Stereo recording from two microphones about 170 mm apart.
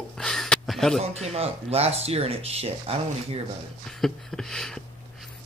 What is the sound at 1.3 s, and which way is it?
Speech, 35° right (ahead or behind).